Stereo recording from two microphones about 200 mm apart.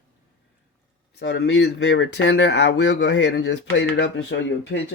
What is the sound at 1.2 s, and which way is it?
Speech, 55° left (ahead or behind).